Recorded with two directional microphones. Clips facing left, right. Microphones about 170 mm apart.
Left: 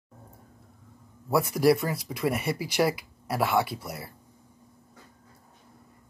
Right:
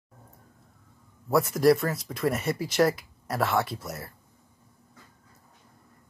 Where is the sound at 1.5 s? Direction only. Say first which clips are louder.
Right 1 dB; 5° left (ahead or behind).